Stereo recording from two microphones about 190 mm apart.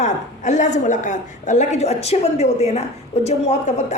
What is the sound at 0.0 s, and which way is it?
A woman's voice, 40° left (ahead or behind).